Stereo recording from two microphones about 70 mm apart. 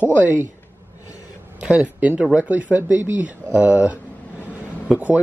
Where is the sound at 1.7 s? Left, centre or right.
Centre.